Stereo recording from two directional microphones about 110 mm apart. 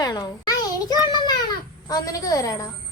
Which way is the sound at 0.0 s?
35° left (ahead or behind).